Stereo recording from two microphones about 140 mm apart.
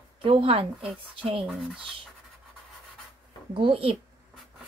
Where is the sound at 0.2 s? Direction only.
40° right (ahead or behind).